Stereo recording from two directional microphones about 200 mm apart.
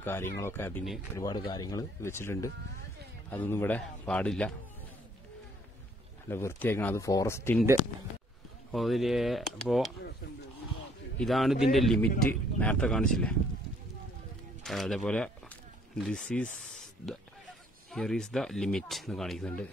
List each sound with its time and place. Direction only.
0.0 s speech: 10° left (ahead or behind)
6.2 s speech: 10° left (ahead or behind)
8.7 s speech: centre (ahead or behind)
11.1 s speech: centre (ahead or behind)
14.6 s speech: centre (ahead or behind)